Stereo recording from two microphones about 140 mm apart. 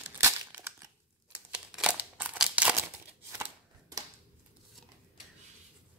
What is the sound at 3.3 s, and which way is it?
Chopping, 20° right (ahead or behind).